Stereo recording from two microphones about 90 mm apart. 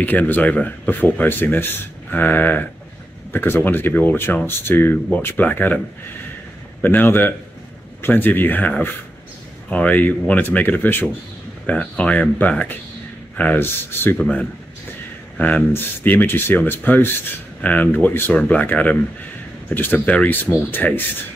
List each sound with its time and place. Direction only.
0.0 s speech: 20° left (ahead or behind)
6.8 s speech: 20° left (ahead or behind)
14.1 s speech: 10° left (ahead or behind)